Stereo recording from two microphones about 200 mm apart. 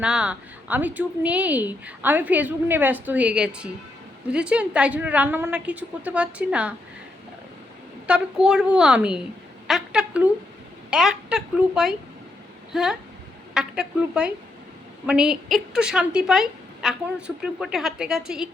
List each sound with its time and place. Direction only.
0.0 s a woman's voice: 5° right (ahead or behind)
8.0 s a woman's voice: 5° right (ahead or behind)